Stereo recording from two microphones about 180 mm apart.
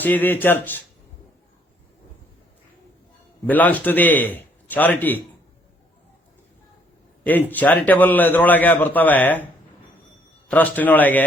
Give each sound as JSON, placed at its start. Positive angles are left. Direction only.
{"t": 0.0, "sound": "a man's voice", "side_deg": 10}
{"t": 3.4, "sound": "a man's voice", "side_deg": 10}
{"t": 7.3, "sound": "a man's voice", "side_deg": 10}
{"t": 10.5, "sound": "a man's voice", "side_deg": 10}